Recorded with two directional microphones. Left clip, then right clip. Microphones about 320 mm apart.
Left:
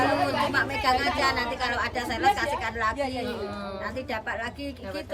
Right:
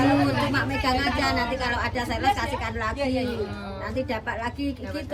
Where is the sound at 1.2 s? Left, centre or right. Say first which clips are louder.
Right 1 dB; centre.